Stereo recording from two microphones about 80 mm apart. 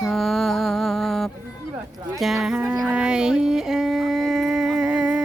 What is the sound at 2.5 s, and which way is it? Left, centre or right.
Music, centre.